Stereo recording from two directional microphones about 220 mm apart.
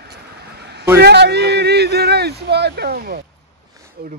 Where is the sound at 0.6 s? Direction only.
50° right (ahead or behind).